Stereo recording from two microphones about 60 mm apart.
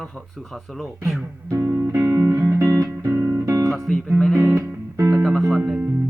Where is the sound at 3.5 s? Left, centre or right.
Right.